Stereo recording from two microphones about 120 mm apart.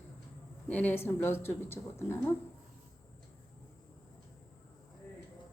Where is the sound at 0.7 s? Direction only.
15° left (ahead or behind).